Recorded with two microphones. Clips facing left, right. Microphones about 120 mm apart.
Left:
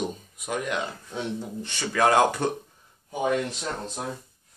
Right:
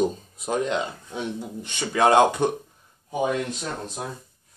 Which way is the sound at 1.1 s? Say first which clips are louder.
Right 1 dB; 15° right (ahead or behind).